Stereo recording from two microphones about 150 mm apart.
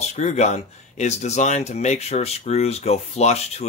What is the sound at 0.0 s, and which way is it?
Speech, 50° left (ahead or behind).